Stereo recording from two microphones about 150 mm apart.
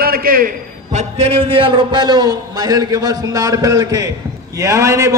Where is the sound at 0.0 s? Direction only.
75° right (ahead or behind).